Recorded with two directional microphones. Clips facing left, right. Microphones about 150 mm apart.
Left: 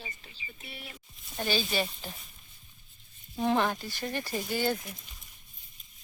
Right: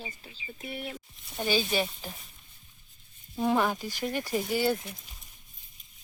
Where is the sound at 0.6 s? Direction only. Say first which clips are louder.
Right 10 dB; 55° right (ahead or behind).